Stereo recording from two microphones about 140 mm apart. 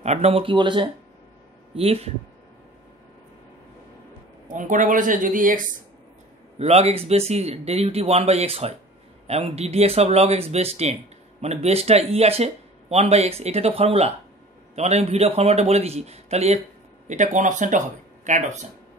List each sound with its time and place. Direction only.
0.0 s speech: 50° right (ahead or behind); by 0.8 s 35° right (ahead or behind)
1.8 s speech: 45° right (ahead or behind)
4.5 s a woman's voice: 65° right (ahead or behind)
6.6 s speech: 50° right (ahead or behind)
17.1 s speech: 60° right (ahead or behind)